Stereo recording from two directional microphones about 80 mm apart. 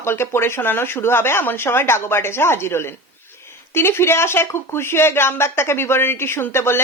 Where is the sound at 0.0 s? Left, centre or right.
Left.